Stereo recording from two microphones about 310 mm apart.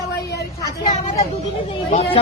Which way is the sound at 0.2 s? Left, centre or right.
Left.